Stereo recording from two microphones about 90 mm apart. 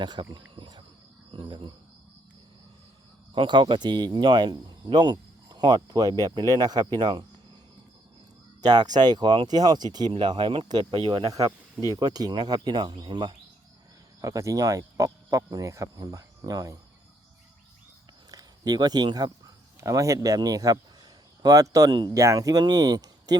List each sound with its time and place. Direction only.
0.0 s cricket: 60° right (ahead or behind)
1.3 s speech: 70° right (ahead or behind)
3.3 s speech: 65° right (ahead or behind)
8.6 s speech: 50° right (ahead or behind); by 11.3 s 80° right
11.9 s speech: 50° right (ahead or behind)
14.2 s speech: 35° right (ahead or behind)
18.3 s speech: 45° right (ahead or behind)
19.8 s speech: 40° right (ahead or behind)
22.2 s speech: 40° right (ahead or behind)